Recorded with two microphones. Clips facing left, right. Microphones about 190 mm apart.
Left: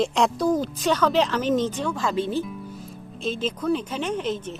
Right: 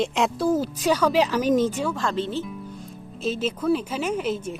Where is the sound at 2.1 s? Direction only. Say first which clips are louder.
Left 2 dB; 10° left (ahead or behind).